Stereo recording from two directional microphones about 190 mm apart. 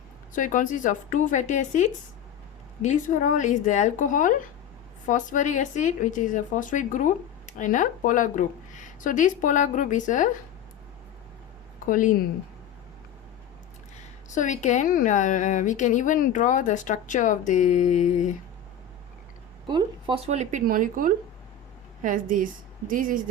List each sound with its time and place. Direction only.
0.3 s a woman's voice: 45° left (ahead or behind)
11.9 s a woman's voice: 45° left (ahead or behind)
14.3 s speech: 40° left (ahead or behind)
19.6 s a woman's voice: 25° right (ahead or behind); by 23.2 s 45° right (ahead or behind)